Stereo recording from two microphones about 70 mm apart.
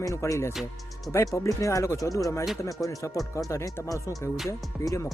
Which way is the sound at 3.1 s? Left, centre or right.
Centre.